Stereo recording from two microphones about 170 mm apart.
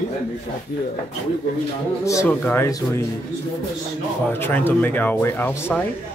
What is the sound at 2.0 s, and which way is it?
Speech, 20° left (ahead or behind).